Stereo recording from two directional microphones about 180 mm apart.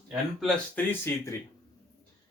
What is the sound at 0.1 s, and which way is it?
Speech, centre (ahead or behind).